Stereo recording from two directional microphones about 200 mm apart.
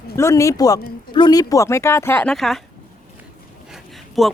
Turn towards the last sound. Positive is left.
turn(degrees=0)  # may be behind; listen again after turning